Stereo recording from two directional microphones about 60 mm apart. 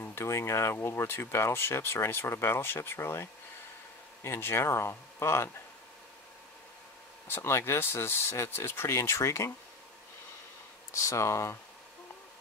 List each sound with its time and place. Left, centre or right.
0.0 s speech: left
7.2 s speech: left
11.1 s speech: left